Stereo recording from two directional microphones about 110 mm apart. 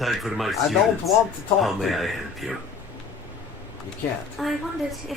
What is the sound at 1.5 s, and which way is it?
Speech, centre (ahead or behind).